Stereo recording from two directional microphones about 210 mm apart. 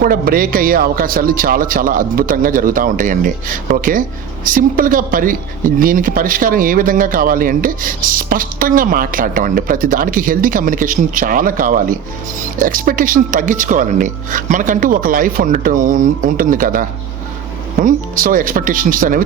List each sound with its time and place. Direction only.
0.0 s a man's voice: 45° right (ahead or behind)
17.8 s a man's voice: 40° right (ahead or behind)